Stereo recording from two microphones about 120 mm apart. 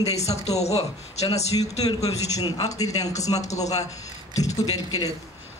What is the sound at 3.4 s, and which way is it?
Speech, 75° left (ahead or behind).